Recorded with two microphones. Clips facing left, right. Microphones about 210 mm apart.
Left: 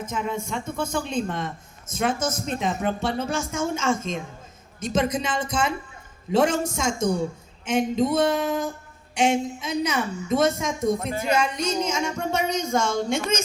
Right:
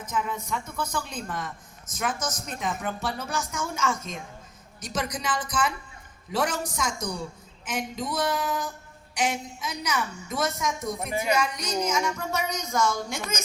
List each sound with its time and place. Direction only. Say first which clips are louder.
0.0 s speech: left 3 dB; 25° left (ahead or behind)